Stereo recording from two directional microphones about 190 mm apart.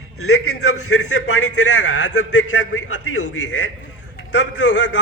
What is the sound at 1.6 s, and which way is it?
A man's voice, 75° left (ahead or behind).